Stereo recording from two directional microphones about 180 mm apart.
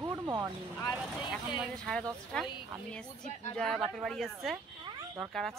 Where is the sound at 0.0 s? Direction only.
15° right (ahead or behind).